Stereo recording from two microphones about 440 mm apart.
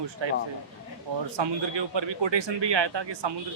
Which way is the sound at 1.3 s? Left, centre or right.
Right.